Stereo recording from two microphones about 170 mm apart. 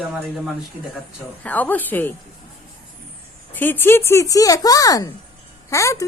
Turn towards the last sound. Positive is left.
turn(degrees=20)  # may be behind; listen again after turning